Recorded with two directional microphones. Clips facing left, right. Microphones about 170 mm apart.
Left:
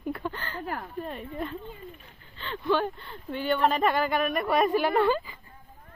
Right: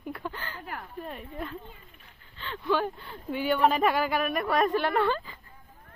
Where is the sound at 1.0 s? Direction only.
5° right (ahead or behind).